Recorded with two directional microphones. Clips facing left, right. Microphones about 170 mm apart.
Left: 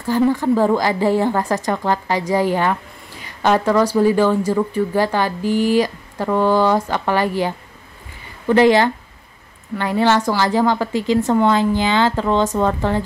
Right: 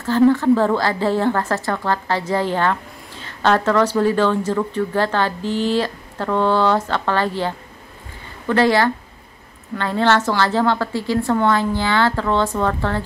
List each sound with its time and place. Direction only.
0.0 s a woman's voice: 15° left (ahead or behind)